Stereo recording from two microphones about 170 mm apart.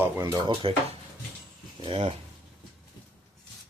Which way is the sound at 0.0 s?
15° right (ahead or behind).